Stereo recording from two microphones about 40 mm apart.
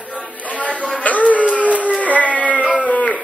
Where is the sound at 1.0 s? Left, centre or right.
Left.